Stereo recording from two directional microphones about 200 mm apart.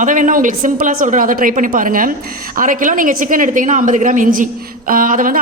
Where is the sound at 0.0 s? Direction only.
40° right (ahead or behind).